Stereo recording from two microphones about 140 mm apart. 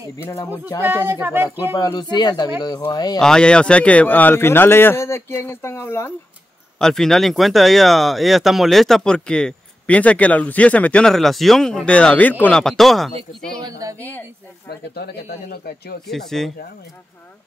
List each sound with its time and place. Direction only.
0.2 s speech: 20° left (ahead or behind)
0.8 s speech: 15° right (ahead or behind)
1.8 s speech: 25° left (ahead or behind)
3.2 s a man's voice: 5° left (ahead or behind)
6.8 s speech: 5° left (ahead or behind)
13.7 s a woman's voice: 25° right (ahead or behind)
13.9 s a man's voice: 15° left (ahead or behind)
15.5 s speech: 90° left
16.1 s speech: centre (ahead or behind)